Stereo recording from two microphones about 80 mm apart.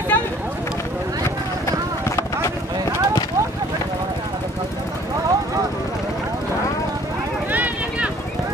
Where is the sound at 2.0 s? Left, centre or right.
Left.